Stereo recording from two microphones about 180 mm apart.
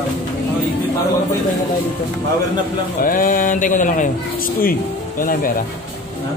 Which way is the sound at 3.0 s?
50° left (ahead or behind).